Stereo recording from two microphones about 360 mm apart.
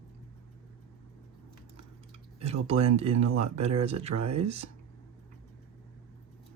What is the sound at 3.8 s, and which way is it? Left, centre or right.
Speech, centre.